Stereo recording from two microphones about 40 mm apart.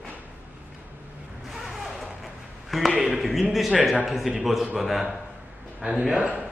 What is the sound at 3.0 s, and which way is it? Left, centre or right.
A man's voice, centre.